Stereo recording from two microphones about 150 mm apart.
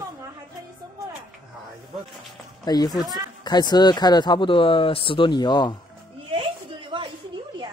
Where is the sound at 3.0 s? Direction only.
25° right (ahead or behind).